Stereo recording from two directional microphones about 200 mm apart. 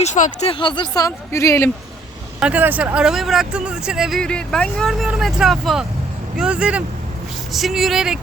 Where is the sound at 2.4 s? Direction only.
10° right (ahead or behind).